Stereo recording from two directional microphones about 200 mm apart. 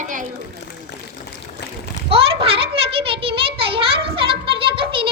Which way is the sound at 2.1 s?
30° right (ahead or behind).